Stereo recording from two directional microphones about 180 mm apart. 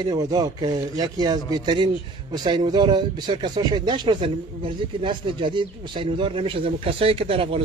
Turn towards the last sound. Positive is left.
turn(degrees=-30)  # may be behind; listen again after turning